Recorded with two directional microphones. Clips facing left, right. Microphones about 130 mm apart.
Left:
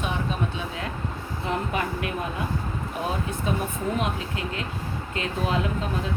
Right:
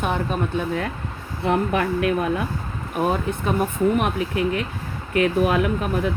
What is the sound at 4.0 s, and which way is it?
Speech, 60° right (ahead or behind).